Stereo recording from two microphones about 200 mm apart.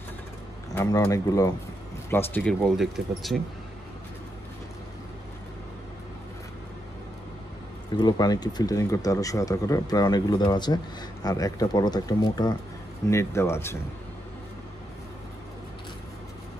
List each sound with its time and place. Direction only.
0.7 s speech: 15° left (ahead or behind)
2.6 s speech: centre (ahead or behind)
7.9 s speech: 20° left (ahead or behind)